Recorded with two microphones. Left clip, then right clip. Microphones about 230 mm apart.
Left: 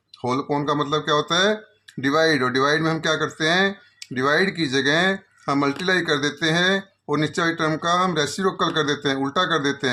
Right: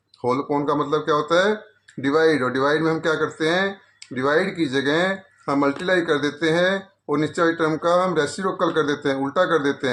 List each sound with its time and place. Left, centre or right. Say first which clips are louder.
0.2 s speech: right 2 dB; left